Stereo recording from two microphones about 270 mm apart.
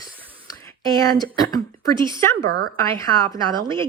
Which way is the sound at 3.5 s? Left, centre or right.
Centre.